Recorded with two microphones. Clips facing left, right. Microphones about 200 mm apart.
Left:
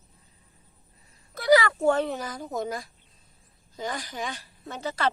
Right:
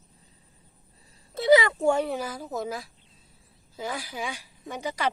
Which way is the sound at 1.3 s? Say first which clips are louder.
Right 1 dB; 25° right (ahead or behind).